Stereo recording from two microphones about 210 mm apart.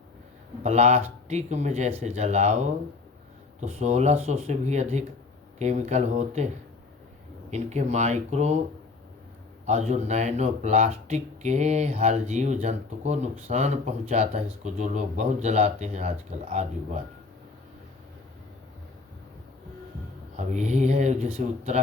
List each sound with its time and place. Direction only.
0.6 s speech: 30° right (ahead or behind)
7.5 s speech: 35° right (ahead or behind)
9.6 s speech: 30° right (ahead or behind)
20.3 s speech: 35° right (ahead or behind)